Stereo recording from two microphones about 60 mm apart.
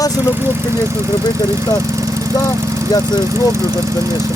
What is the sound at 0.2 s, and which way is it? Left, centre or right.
Speech, right.